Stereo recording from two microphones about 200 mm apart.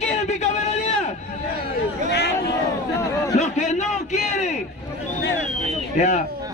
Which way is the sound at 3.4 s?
35° left (ahead or behind).